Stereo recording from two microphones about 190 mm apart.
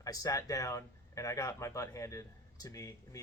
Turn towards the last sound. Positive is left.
turn(degrees=15)  # may be behind; listen again after turning